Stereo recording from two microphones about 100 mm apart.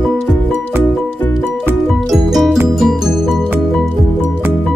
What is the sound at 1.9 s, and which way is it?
Music, centre (ahead or behind).